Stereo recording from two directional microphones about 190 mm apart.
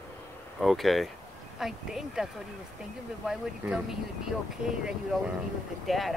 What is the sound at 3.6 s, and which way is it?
Speech, 10° right (ahead or behind).